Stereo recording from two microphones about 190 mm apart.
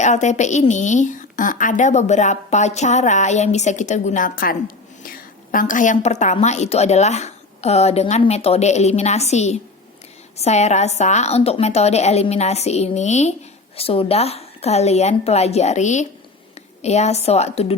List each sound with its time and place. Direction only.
0.0 s a woman's voice: 40° left (ahead or behind)